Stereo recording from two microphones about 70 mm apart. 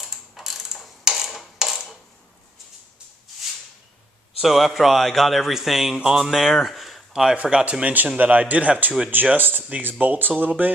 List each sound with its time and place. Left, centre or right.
0.0 s mechanisms: centre
4.4 s a man's voice: centre
7.6 s speech: centre